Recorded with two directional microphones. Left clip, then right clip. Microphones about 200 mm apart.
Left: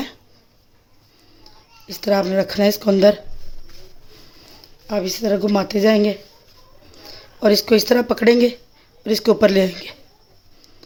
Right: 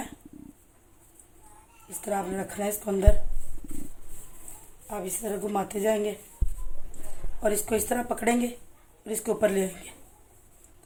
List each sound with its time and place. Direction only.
2.0 s speech: 60° left (ahead or behind)
4.9 s speech: 60° left (ahead or behind)
7.4 s speech: 60° left (ahead or behind)